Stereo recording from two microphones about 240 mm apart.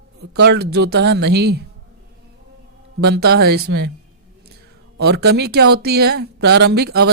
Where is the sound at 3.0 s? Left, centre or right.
Right.